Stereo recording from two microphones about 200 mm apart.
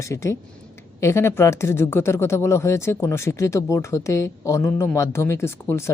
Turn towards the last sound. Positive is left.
turn(degrees=15)  # may be behind; listen again after turning